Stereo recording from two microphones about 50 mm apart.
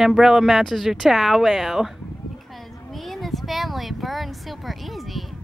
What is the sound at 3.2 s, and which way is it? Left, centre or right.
Speech, centre.